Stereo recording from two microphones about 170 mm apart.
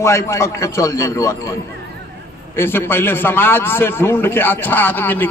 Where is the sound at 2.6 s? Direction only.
15° left (ahead or behind).